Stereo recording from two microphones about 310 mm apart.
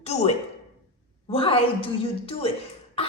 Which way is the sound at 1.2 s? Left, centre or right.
Centre.